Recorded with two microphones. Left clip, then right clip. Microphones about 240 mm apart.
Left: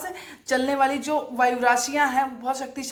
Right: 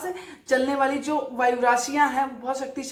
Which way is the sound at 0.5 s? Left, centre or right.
Left.